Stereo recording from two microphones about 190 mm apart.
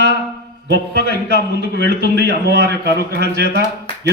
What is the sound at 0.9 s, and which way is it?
Speech, 55° left (ahead or behind).